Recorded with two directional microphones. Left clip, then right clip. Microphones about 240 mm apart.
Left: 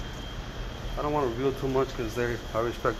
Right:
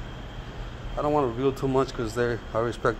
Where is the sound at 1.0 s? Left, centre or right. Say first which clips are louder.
Right 3 dB; right.